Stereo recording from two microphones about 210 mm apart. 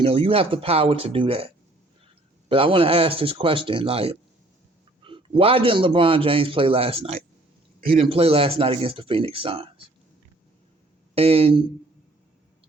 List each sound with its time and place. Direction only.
0.0 s a man's voice: 25° right (ahead or behind)
2.5 s a man's voice: 25° right (ahead or behind)
11.1 s a man's voice: 25° right (ahead or behind)